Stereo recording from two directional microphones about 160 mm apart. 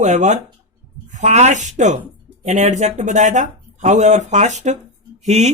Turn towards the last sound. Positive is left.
turn(degrees=-45)  # may be behind; listen again after turning